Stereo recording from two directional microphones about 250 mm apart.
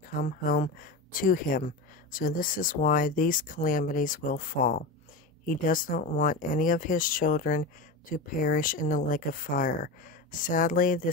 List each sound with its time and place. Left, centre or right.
0.2 s speech: left